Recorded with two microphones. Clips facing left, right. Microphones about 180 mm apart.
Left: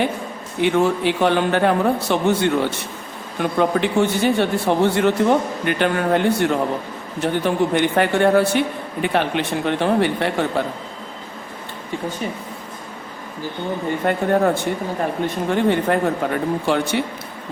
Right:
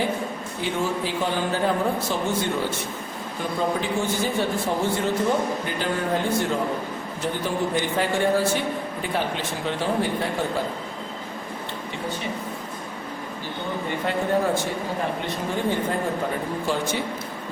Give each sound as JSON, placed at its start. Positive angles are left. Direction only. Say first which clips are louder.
{"t": 0.6, "sound": "a man's voice", "louder": "left 9 dB", "side_deg": 70}
{"t": 14.0, "sound": "a man's voice", "louder": "left 5 dB", "side_deg": 55}
{"t": 15.5, "sound": "speech", "louder": "left 7 dB", "side_deg": 70}